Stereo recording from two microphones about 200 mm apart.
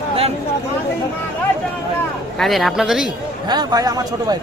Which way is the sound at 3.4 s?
20° right (ahead or behind).